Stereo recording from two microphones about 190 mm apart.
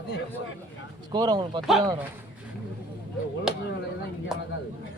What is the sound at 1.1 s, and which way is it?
Speech, 20° right (ahead or behind).